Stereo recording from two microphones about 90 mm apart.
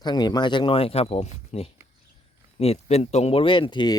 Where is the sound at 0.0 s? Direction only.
55° left (ahead or behind); by 1.1 s 90° left.